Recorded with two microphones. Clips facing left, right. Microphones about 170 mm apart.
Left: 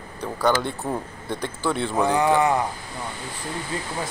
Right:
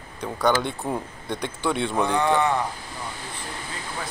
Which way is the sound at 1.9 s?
5° left (ahead or behind).